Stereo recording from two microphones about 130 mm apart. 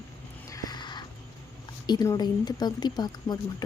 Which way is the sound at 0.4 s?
30° left (ahead or behind).